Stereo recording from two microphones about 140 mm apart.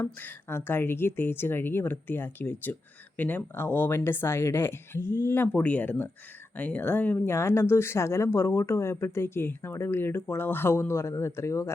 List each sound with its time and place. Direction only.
0.0 s speech: 15° left (ahead or behind)